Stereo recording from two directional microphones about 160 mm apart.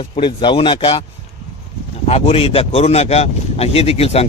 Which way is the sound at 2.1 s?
40° left (ahead or behind).